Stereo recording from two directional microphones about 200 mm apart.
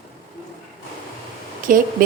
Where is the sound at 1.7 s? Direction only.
40° right (ahead or behind).